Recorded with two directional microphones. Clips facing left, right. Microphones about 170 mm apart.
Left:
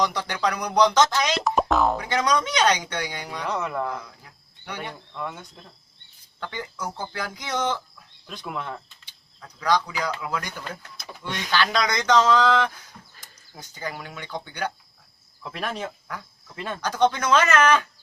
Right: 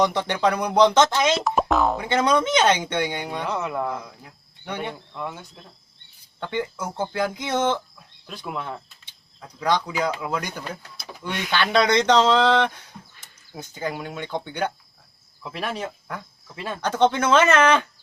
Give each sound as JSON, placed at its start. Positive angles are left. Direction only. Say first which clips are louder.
{"t": 0.0, "sound": "speech", "louder": "right 4 dB", "side_deg": -25}
{"t": 1.4, "sound": "speech", "louder": "even", "side_deg": -5}
{"t": 2.0, "sound": "speech", "louder": "right 3 dB", "side_deg": -25}
{"t": 3.4, "sound": "speech", "louder": "left 1 dB", "side_deg": -5}
{"t": 4.6, "sound": "speech", "louder": "right 4 dB", "side_deg": -25}
{"t": 5.1, "sound": "speech", "louder": "right 1 dB", "side_deg": -5}
{"t": 6.4, "sound": "speech", "louder": "right 5 dB", "side_deg": -20}
{"t": 8.3, "sound": "speech", "louder": "right 1 dB", "side_deg": -5}
{"t": 9.6, "sound": "speech", "louder": "right 1 dB", "side_deg": -25}
{"t": 15.4, "sound": "speech", "louder": "right 1 dB", "side_deg": -5}
{"t": 16.8, "sound": "speech", "louder": "right 2 dB", "side_deg": -25}